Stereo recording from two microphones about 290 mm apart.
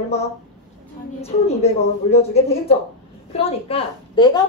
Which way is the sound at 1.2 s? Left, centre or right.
Left.